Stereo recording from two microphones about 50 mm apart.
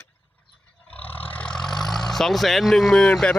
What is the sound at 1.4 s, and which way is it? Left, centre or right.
Vehicle, centre.